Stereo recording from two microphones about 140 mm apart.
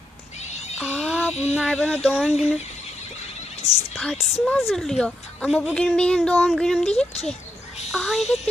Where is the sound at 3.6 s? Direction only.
25° right (ahead or behind).